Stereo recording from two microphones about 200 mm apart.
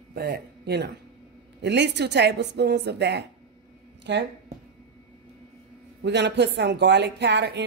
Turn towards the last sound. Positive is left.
turn(degrees=-60)  # may be behind; listen again after turning